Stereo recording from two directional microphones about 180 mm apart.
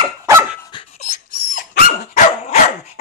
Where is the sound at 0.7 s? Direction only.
35° left (ahead or behind).